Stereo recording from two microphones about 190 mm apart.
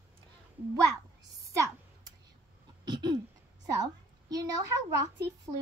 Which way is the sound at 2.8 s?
20° right (ahead or behind).